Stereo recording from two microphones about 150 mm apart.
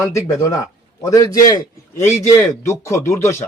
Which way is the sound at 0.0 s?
20° left (ahead or behind).